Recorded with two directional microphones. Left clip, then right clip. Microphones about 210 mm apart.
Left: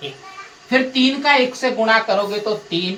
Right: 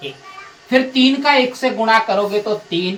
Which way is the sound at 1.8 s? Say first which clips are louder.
Right 2 dB; 20° left (ahead or behind).